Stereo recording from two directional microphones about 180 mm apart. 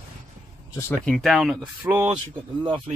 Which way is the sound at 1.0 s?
Centre (ahead or behind).